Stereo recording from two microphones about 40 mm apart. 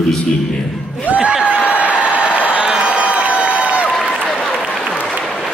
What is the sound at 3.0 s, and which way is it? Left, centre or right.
Crowd, right.